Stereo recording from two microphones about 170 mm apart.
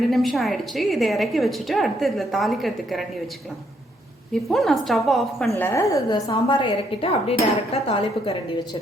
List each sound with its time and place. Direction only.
0.1 s a woman's voice: centre (ahead or behind)
4.4 s a woman's voice: centre (ahead or behind)
5.5 s a woman's voice: 15° left (ahead or behind); by 8.6 s 35° left (ahead or behind)